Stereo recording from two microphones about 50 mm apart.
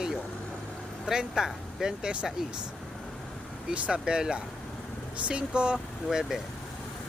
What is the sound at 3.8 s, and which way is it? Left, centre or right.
Speech, right.